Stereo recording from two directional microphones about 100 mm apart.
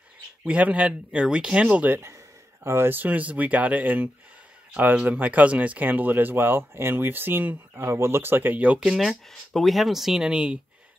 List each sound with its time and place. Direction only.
0.5 s speech: 15° right (ahead or behind)